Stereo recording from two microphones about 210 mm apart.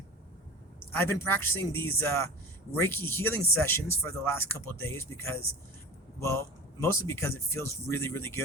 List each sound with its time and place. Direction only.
0.9 s speech: 10° left (ahead or behind)